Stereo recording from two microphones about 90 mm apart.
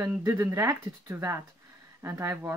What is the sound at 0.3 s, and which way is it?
Speech, 25° right (ahead or behind).